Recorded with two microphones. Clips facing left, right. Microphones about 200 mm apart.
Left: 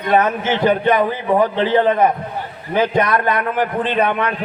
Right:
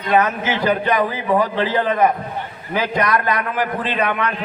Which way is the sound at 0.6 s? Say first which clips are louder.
Left 3 dB; 25° left (ahead or behind).